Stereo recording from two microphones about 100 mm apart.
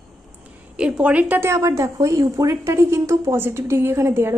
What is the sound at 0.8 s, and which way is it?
Speech, 10° right (ahead or behind).